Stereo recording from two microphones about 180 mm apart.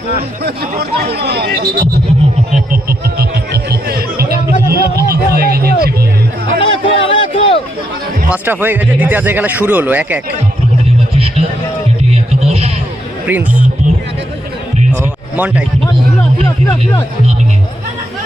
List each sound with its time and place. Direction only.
0.8 s speech: 60° right (ahead or behind)
3.2 s music: 60° right (ahead or behind)
6.6 s a sound: 30° left (ahead or behind)
8.3 s speech: 10° right (ahead or behind)
11.1 s music: 30° right (ahead or behind)
15.4 s speech: 5° right (ahead or behind)